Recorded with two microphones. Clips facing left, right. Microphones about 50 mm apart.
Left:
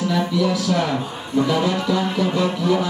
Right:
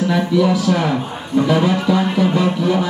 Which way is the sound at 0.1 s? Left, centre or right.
Centre.